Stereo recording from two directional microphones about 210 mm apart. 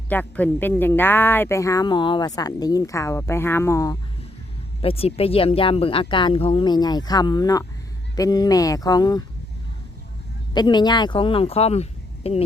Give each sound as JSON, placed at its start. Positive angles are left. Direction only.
{"t": 0.1, "sound": "speech", "side_deg": 10}
{"t": 4.8, "sound": "speech", "side_deg": 25}
{"t": 10.5, "sound": "speech", "side_deg": 20}